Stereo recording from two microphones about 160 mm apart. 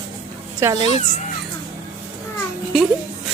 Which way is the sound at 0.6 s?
15° right (ahead or behind).